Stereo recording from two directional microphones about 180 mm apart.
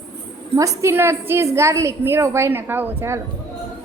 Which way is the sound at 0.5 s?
20° right (ahead or behind).